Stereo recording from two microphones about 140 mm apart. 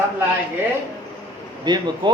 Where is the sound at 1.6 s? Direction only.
30° right (ahead or behind).